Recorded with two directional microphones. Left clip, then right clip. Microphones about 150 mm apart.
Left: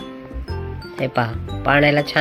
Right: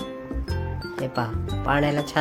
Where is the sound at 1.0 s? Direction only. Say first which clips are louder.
Left 7 dB; 15° left (ahead or behind).